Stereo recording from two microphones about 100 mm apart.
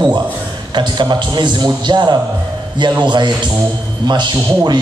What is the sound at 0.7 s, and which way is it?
A man's voice, 45° right (ahead or behind).